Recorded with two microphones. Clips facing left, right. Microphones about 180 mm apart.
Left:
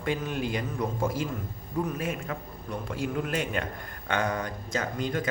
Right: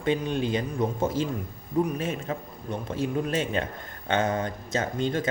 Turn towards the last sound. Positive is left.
turn(degrees=-25)  # may be behind; listen again after turning